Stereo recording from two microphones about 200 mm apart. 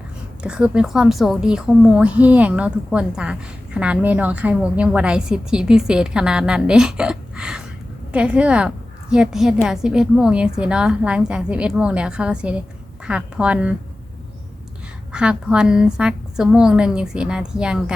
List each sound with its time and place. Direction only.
0.4 s a woman's voice: 5° right (ahead or behind)
15.1 s a woman's voice: 5° right (ahead or behind)